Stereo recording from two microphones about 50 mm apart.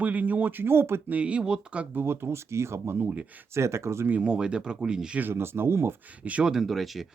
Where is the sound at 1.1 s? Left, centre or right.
Right.